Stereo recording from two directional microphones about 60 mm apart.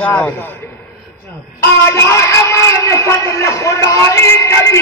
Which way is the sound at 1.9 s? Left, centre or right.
Left.